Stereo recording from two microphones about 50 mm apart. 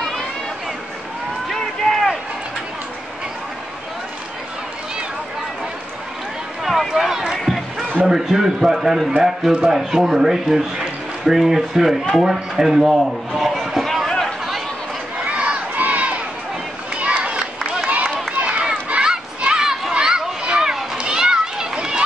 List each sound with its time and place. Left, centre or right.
1.5 s run: centre
6.6 s run: centre
7.3 s music: centre
8.1 s speech: centre
12.0 s a sound: centre
15.2 s crowd: right
16.9 s a sound: right
17.8 s run: right
19.0 s children playing: centre